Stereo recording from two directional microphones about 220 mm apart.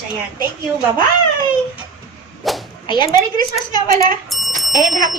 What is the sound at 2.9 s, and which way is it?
A woman's voice, 20° left (ahead or behind).